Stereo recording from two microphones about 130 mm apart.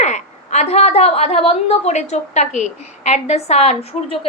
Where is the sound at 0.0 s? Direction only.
60° left (ahead or behind).